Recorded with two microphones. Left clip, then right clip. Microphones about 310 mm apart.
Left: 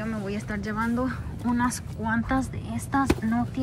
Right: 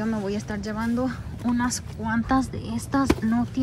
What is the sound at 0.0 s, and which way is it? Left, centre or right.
A woman's voice, centre.